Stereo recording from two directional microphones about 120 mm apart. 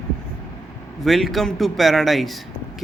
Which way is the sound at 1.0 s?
Centre (ahead or behind).